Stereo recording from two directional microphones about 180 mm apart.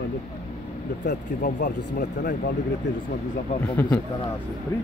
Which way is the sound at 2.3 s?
65° left (ahead or behind).